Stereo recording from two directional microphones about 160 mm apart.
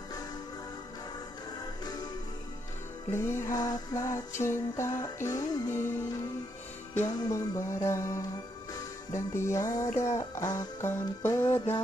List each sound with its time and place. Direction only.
3.1 s music: 15° left (ahead or behind)
6.9 s music: 15° left (ahead or behind)